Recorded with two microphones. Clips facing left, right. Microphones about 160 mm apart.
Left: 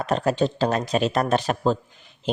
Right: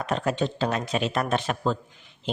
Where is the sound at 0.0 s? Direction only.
35° left (ahead or behind).